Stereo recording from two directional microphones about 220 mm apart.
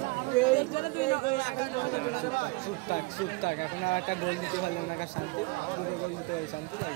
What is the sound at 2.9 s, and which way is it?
Speech, 40° left (ahead or behind).